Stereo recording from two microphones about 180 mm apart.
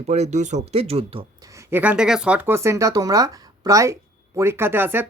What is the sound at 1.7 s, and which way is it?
Speech, 10° right (ahead or behind).